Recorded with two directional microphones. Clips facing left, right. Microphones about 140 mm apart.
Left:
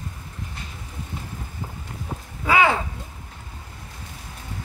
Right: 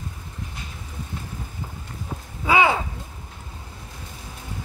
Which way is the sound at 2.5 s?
15° right (ahead or behind).